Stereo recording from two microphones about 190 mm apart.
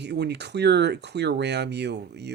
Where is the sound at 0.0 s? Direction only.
60° right (ahead or behind).